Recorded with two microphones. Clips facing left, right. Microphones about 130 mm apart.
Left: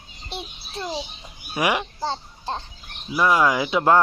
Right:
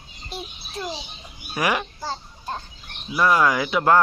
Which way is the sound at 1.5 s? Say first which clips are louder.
Left 1 dB; 20° left (ahead or behind).